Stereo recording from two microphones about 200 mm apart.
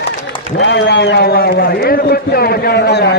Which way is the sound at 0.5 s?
60° left (ahead or behind).